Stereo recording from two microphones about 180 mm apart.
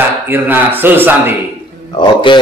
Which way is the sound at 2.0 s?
25° left (ahead or behind).